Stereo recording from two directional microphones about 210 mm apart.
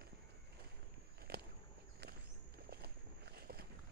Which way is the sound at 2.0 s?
50° right (ahead or behind).